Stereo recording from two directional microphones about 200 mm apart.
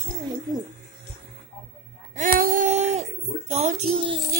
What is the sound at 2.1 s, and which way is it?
Speech, 40° right (ahead or behind).